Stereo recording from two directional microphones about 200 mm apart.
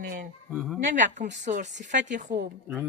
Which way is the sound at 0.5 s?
Centre (ahead or behind).